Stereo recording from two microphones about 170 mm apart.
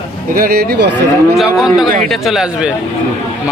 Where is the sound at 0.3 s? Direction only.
60° right (ahead or behind).